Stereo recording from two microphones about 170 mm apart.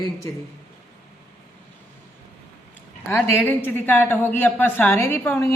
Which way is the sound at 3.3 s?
10° left (ahead or behind).